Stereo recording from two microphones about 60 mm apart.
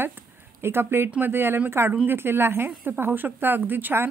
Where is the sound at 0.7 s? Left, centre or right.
Right.